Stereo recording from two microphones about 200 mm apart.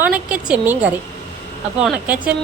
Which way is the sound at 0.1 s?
5° right (ahead or behind).